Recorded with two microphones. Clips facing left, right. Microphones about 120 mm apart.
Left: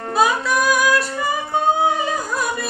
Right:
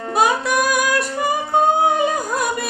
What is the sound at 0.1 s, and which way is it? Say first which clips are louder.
Music: even; 55° right (ahead or behind).